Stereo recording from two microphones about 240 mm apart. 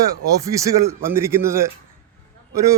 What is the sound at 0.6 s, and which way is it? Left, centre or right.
Speech, centre.